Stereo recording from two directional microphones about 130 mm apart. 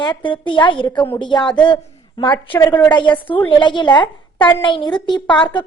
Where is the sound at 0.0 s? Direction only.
40° left (ahead or behind).